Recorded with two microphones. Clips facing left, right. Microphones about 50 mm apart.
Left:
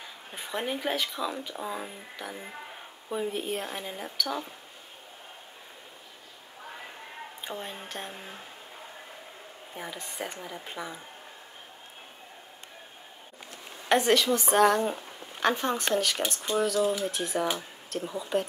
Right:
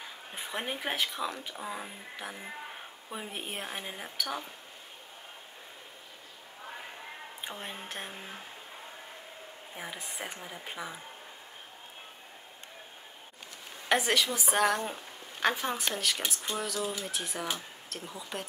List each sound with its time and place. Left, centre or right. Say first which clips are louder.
0.3 s a woman's voice: left 4 dB; centre
1.5 s speech: left 4 dB; centre
3.1 s a woman's voice: left 9 dB; centre
7.5 s a woman's voice: left 7 dB; centre
7.9 s speech: left 2 dB; centre
9.8 s a woman's voice: left 3 dB; centre
13.8 s speech: left 5 dB; centre